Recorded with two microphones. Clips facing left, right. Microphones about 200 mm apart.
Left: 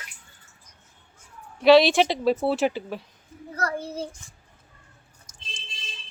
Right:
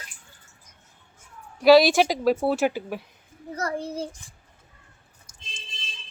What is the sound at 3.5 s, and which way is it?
Speech, 20° right (ahead or behind).